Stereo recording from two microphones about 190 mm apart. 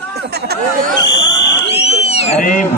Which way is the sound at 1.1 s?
65° left (ahead or behind).